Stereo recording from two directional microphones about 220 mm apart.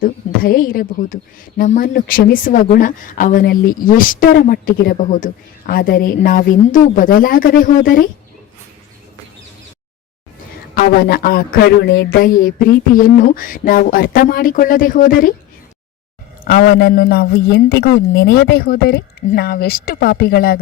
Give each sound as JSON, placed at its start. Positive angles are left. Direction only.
{"t": 0.0, "sound": "a woman's voice", "side_deg": 40}
{"t": 10.8, "sound": "a woman's voice", "side_deg": 45}
{"t": 16.4, "sound": "a man's voice", "side_deg": 40}